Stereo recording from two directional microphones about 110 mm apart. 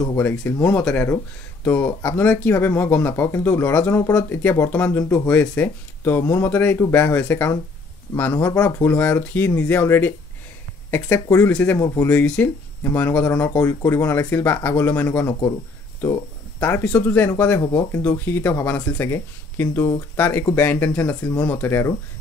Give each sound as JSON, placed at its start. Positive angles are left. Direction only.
{"t": 0.2, "sound": "speech", "side_deg": 20}
{"t": 11.1, "sound": "speech", "side_deg": 20}
{"t": 11.8, "sound": "speech", "side_deg": 30}
{"t": 12.1, "sound": "speech", "side_deg": 15}
{"t": 16.5, "sound": "speech", "side_deg": 15}